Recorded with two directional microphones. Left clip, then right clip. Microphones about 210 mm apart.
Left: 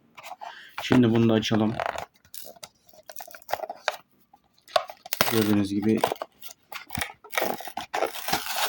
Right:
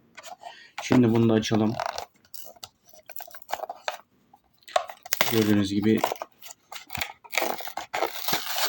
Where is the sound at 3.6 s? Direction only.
Centre (ahead or behind).